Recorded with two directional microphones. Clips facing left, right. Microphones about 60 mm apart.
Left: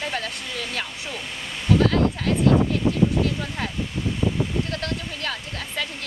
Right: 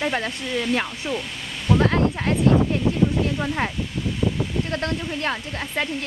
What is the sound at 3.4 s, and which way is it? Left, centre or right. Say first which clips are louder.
Speech: right 4 dB; right.